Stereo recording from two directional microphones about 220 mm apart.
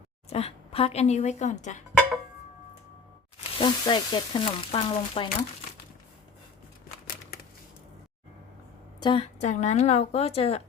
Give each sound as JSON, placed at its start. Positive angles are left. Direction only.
{"t": 0.3, "sound": "a woman's voice", "side_deg": 25}
{"t": 3.6, "sound": "sizzle", "side_deg": 20}
{"t": 9.0, "sound": "sizzle", "side_deg": 25}